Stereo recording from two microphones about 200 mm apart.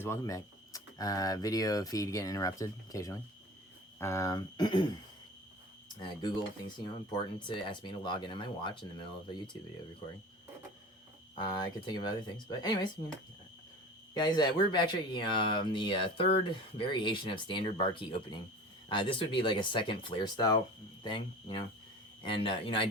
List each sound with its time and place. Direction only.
0.0 s speech: 15° left (ahead or behind)
6.0 s speech: 20° left (ahead or behind)
11.9 s speech: 20° left (ahead or behind)
14.1 s speech: 20° left (ahead or behind)